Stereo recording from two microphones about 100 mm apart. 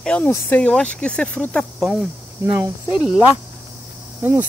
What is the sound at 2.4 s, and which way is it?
Speech, 25° right (ahead or behind).